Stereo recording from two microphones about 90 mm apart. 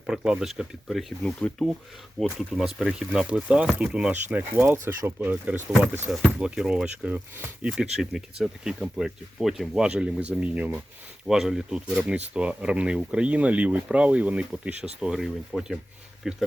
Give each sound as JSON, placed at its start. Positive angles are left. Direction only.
{"t": 0.1, "sound": "speech", "side_deg": -5}
{"t": 1.2, "sound": "speech", "side_deg": 10}
{"t": 2.2, "sound": "speech", "side_deg": 0}
{"t": 6.4, "sound": "speech", "side_deg": -10}
{"t": 7.7, "sound": "speech", "side_deg": -5}